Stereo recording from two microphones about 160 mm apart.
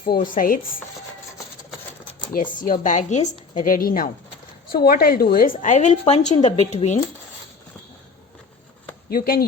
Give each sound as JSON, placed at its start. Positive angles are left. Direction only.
{"t": 0.0, "sound": "a woman's voice", "side_deg": 60}
{"t": 2.3, "sound": "a woman's voice", "side_deg": 60}
{"t": 5.6, "sound": "speech", "side_deg": 50}
{"t": 9.0, "sound": "speech", "side_deg": 65}